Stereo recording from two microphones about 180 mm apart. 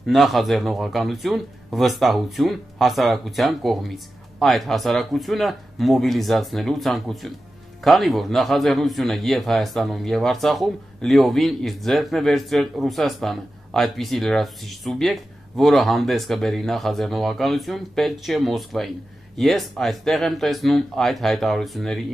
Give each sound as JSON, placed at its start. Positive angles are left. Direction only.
{"t": 0.0, "sound": "a man's voice", "side_deg": 0}